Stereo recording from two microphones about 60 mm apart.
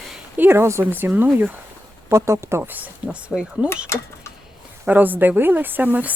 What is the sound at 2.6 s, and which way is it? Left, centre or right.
Speech, right.